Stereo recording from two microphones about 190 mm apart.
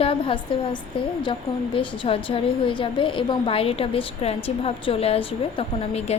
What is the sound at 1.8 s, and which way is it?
A woman's voice, 25° left (ahead or behind).